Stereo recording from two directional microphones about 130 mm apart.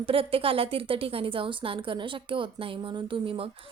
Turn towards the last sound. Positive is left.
turn(degrees=-45)  # may be behind; listen again after turning